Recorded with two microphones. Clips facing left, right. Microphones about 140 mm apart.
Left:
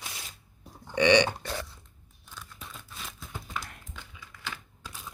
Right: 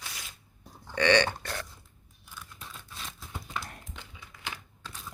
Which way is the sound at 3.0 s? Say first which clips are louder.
Even; centre (ahead or behind).